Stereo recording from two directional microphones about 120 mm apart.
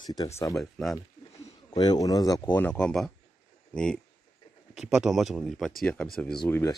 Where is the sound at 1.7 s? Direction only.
35° left (ahead or behind).